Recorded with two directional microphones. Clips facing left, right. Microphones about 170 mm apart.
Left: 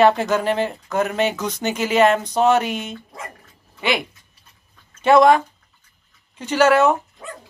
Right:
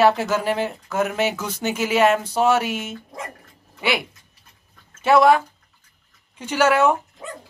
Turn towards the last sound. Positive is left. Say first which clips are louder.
# left 2 dB
turn(degrees=-10)  # may be behind; listen again after turning